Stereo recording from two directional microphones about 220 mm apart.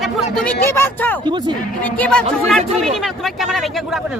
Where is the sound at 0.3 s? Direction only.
10° left (ahead or behind).